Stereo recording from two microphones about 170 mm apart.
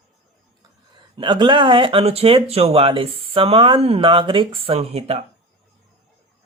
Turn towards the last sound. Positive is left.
turn(degrees=-35)  # may be behind; listen again after turning